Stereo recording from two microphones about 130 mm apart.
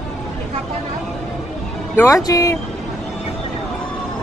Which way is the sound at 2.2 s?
25° left (ahead or behind).